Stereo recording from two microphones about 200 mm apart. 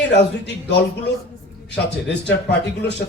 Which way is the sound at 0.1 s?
60° left (ahead or behind).